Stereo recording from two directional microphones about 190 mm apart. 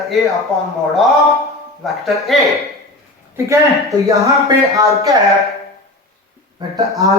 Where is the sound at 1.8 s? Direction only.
Centre (ahead or behind).